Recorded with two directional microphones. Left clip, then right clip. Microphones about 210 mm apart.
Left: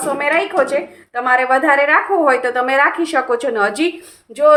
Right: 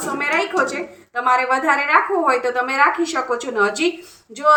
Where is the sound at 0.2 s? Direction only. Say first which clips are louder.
Left 2 dB; 50° left (ahead or behind).